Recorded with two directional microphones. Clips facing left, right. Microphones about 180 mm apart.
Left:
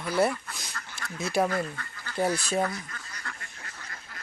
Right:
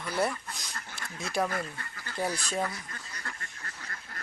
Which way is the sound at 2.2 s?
25° left (ahead or behind).